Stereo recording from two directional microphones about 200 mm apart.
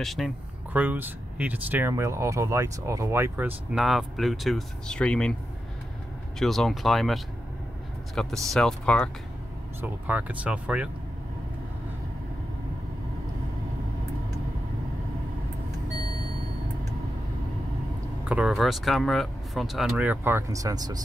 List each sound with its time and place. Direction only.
0.0 s speech: centre (ahead or behind)
6.4 s speech: centre (ahead or behind)
9.8 s speech: 5° right (ahead or behind)
18.3 s speech: centre (ahead or behind); by 21.0 s 20° right (ahead or behind)